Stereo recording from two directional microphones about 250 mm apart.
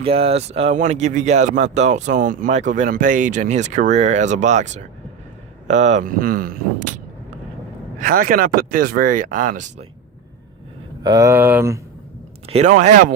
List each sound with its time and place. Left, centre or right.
0.0 s speech: right
11.0 s speech: centre
12.5 s speech: right